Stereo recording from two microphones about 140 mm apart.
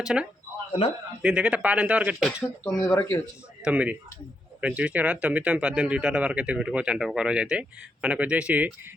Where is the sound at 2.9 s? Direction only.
20° left (ahead or behind).